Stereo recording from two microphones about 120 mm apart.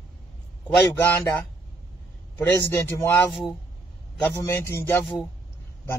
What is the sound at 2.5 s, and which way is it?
Speech, 25° left (ahead or behind).